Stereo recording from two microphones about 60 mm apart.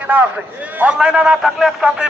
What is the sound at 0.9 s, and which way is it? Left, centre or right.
Speech, centre.